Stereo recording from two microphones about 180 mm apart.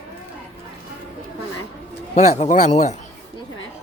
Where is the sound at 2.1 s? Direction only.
40° left (ahead or behind).